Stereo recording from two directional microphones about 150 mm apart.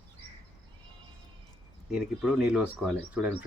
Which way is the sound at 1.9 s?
5° right (ahead or behind).